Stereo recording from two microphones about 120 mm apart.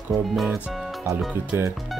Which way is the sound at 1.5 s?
20° right (ahead or behind).